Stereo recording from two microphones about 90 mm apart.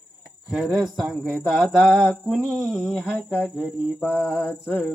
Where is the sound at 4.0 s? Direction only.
20° left (ahead or behind).